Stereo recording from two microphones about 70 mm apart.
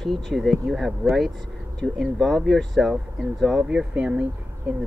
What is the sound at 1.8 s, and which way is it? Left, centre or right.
Speech, centre.